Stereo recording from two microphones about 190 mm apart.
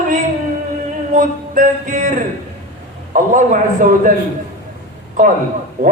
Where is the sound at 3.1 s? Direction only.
45° right (ahead or behind).